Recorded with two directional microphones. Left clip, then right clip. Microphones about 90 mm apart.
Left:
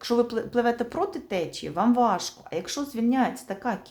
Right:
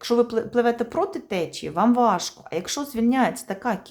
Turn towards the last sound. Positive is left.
turn(degrees=-45)  # may be behind; listen again after turning